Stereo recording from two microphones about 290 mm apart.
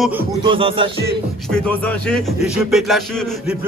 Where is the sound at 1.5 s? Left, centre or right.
Centre.